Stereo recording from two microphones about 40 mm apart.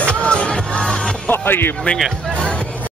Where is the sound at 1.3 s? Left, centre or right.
Left.